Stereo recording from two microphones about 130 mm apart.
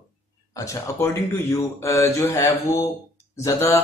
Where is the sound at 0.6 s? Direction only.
25° left (ahead or behind).